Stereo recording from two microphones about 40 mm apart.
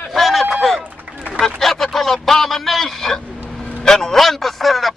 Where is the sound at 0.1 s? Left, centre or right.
Centre.